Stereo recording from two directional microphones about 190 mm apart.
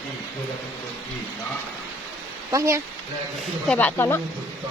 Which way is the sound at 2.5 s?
15° right (ahead or behind).